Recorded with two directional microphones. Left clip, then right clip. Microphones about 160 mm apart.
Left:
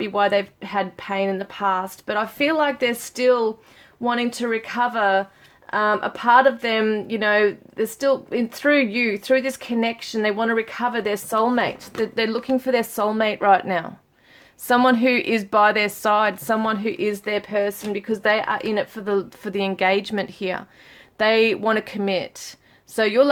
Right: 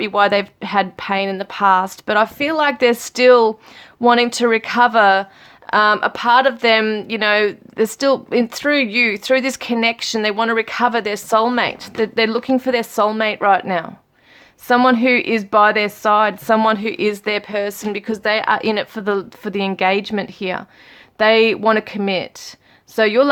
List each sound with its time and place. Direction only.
0.0 s speech: 25° right (ahead or behind)
16.6 s speech: 25° right (ahead or behind)